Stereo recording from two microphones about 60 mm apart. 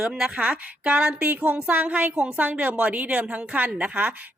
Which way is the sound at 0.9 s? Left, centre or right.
Right.